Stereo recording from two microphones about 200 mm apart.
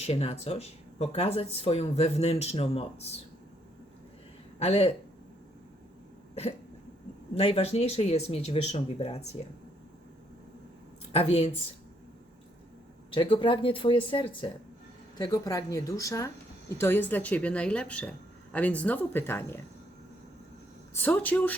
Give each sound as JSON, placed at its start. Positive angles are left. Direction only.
{"t": 0.0, "sound": "speech", "side_deg": 30}
{"t": 4.6, "sound": "speech", "side_deg": 30}
{"t": 7.3, "sound": "speech", "side_deg": 30}
{"t": 11.1, "sound": "speech", "side_deg": 30}
{"t": 13.1, "sound": "speech", "side_deg": 25}
{"t": 20.9, "sound": "speech", "side_deg": 10}